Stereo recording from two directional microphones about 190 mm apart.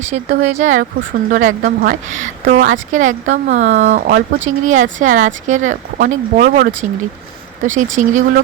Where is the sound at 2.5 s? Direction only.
65° right (ahead or behind).